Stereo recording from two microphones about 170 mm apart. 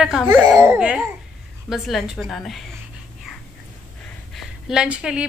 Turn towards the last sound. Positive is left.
turn(degrees=-5)  # may be behind; listen again after turning